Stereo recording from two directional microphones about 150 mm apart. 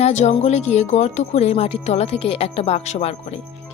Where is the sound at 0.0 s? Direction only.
50° left (ahead or behind).